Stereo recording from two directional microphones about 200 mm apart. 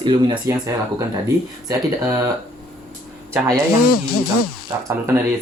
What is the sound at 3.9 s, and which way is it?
Speech, 50° left (ahead or behind).